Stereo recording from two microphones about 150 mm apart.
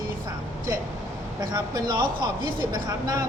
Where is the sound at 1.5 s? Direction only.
30° right (ahead or behind).